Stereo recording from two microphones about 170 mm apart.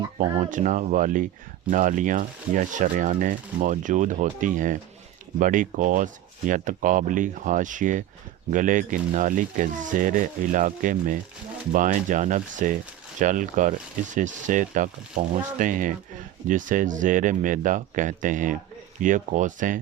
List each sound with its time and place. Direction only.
0.2 s speech: 45° right (ahead or behind)